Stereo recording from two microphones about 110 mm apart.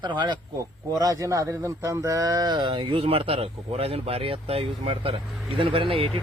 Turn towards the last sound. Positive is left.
turn(degrees=-55)  # may be behind; listen again after turning